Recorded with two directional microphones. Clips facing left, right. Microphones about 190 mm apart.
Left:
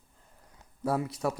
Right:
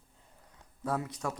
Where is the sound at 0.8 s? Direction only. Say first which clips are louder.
Left 5 dB; 25° left (ahead or behind).